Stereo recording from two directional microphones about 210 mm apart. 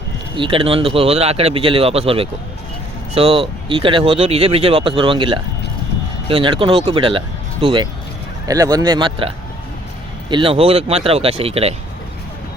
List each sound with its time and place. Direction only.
0.3 s speech: 25° right (ahead or behind)